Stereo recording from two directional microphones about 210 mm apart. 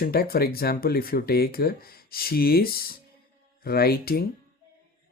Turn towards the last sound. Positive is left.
turn(degrees=45)  # may be behind; listen again after turning